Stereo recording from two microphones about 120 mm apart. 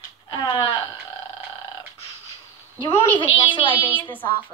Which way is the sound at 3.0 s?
45° left (ahead or behind).